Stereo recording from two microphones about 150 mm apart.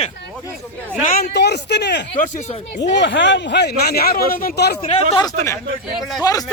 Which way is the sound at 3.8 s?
90° left.